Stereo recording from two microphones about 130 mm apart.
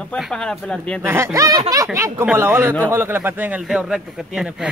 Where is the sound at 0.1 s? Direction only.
5° left (ahead or behind).